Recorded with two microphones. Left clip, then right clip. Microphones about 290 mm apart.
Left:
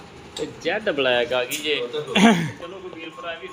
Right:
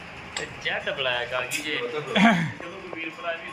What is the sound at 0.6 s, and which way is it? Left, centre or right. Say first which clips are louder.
Speech: left 5 dB; left.